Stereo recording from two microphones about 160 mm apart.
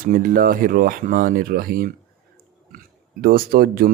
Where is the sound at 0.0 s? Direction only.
55° right (ahead or behind).